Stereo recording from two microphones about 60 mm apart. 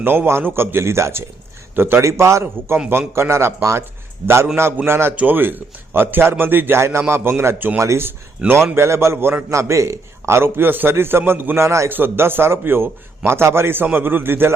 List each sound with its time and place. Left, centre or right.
0.0 s a man's voice: right
1.7 s a man's voice: right
2.0 s a man's voice: right
4.9 s a man's voice: right
5.1 s a man's voice: right
7.8 s a man's voice: right
8.4 s a man's voice: right
11.6 s a man's voice: right
11.9 s a man's voice: right